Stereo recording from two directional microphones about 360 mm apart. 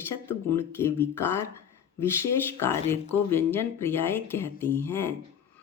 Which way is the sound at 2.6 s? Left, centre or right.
Centre.